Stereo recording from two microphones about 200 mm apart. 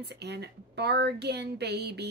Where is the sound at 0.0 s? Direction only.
55° right (ahead or behind).